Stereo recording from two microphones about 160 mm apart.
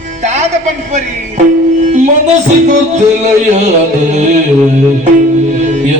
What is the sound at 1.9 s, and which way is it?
Music, 50° right (ahead or behind).